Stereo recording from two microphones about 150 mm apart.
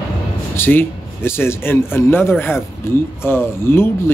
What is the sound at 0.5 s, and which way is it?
A man's voice, 15° left (ahead or behind).